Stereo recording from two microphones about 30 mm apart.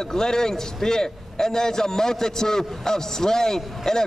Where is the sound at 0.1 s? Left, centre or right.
Centre.